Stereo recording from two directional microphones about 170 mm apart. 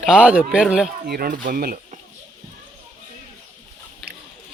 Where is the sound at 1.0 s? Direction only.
65° right (ahead or behind).